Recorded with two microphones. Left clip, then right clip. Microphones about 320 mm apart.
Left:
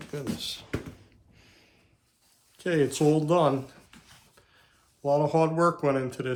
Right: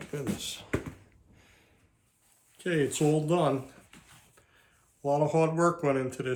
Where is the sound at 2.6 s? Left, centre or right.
Centre.